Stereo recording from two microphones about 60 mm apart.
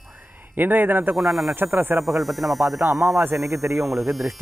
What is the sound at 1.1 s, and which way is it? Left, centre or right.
Speech, centre.